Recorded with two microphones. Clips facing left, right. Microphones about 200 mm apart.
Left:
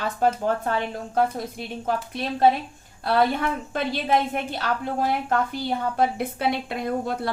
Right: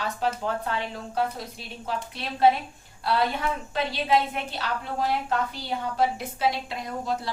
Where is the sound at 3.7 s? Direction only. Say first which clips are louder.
Left 1 dB; 50° left (ahead or behind).